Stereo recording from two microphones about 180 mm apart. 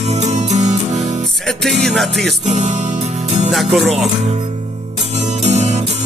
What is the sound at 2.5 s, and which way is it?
Music, 40° right (ahead or behind).